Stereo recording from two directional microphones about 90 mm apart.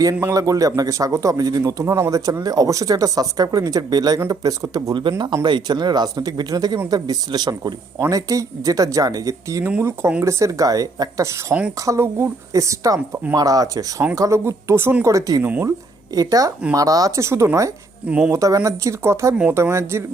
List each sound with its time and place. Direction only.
0.0 s a man's voice: 40° right (ahead or behind)
4.9 s speech: 60° right (ahead or behind)
8.1 s a man's voice: 40° right (ahead or behind)
14.2 s a man's voice: 35° right (ahead or behind)